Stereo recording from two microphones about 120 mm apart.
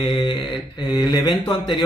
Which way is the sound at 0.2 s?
40° left (ahead or behind).